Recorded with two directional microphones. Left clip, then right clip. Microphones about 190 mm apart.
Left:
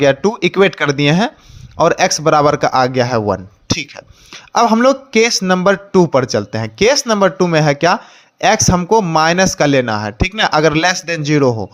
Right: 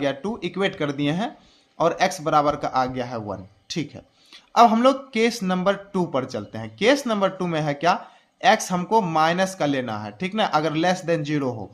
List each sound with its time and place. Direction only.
0.0 s a man's voice: 40° left (ahead or behind)